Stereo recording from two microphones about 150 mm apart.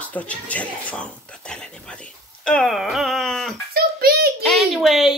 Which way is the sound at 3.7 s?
90° right.